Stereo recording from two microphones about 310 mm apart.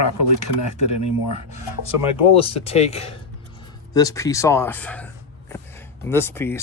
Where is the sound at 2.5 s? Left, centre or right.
Centre.